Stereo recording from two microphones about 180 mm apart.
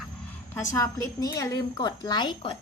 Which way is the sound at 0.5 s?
20° left (ahead or behind).